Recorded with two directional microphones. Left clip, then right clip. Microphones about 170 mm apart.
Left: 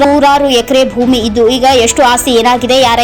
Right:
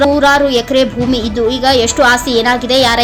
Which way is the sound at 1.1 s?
35° right (ahead or behind).